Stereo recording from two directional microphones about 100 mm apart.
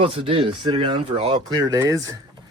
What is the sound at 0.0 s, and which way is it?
Speech, 60° right (ahead or behind).